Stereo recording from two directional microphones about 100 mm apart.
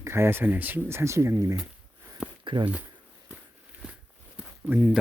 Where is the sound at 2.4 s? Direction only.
50° right (ahead or behind).